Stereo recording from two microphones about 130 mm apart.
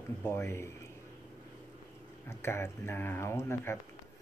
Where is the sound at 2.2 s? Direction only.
20° left (ahead or behind).